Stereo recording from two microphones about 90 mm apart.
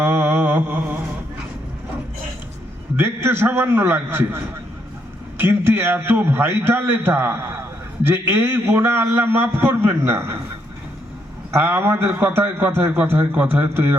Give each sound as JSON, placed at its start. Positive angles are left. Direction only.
{"t": 0.0, "sound": "mantra", "side_deg": -25}
{"t": 3.0, "sound": "a man's voice", "side_deg": -25}
{"t": 5.4, "sound": "a man's voice", "side_deg": -25}
{"t": 11.5, "sound": "a man's voice", "side_deg": -25}